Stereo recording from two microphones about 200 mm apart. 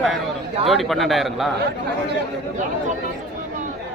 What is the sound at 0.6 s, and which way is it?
Speech, centre (ahead or behind).